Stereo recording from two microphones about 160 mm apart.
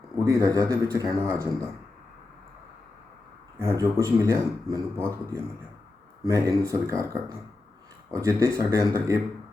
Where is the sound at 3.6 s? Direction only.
20° right (ahead or behind).